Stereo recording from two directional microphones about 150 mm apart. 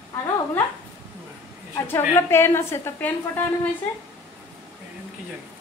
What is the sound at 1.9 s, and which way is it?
A woman's voice, 15° left (ahead or behind).